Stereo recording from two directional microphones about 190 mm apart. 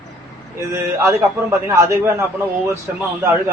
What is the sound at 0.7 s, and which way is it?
A man's voice, 15° right (ahead or behind).